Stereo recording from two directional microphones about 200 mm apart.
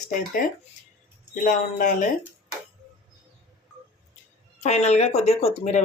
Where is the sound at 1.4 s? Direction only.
40° left (ahead or behind).